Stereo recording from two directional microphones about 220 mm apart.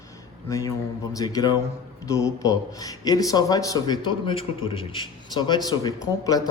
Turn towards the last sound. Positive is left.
turn(degrees=15)  # may be behind; listen again after turning